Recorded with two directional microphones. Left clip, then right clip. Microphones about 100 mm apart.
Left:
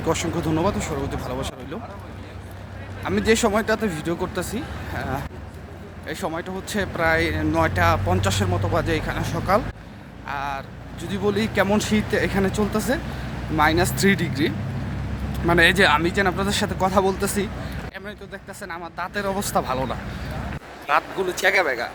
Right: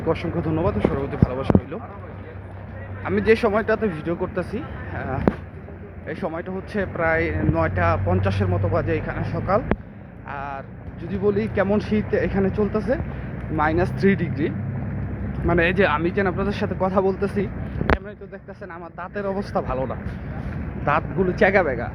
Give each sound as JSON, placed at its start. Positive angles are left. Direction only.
{"t": 0.1, "sound": "speech", "side_deg": 60}
{"t": 3.0, "sound": "speech", "side_deg": 45}
{"t": 10.2, "sound": "vehicle", "side_deg": 55}
{"t": 11.0, "sound": "speech", "side_deg": 55}
{"t": 18.6, "sound": "speech", "side_deg": 50}
{"t": 20.8, "sound": "speech", "side_deg": 65}